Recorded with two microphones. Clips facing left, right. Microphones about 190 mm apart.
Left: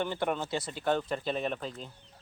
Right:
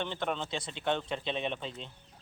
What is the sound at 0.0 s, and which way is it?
Speech, 10° left (ahead or behind).